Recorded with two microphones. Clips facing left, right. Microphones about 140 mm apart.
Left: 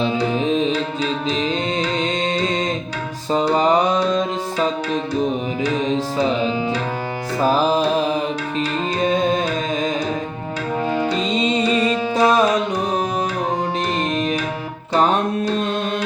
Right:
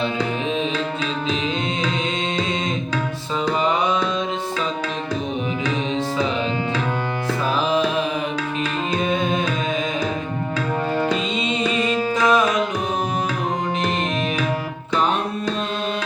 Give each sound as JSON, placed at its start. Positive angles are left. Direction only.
{"t": 3.3, "sound": "music", "side_deg": 40}
{"t": 7.4, "sound": "music", "side_deg": 40}
{"t": 9.0, "sound": "tabla", "side_deg": 35}
{"t": 11.3, "sound": "music", "side_deg": 35}
{"t": 14.9, "sound": "music", "side_deg": 40}